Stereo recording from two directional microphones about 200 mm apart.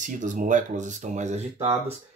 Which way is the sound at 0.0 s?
40° right (ahead or behind).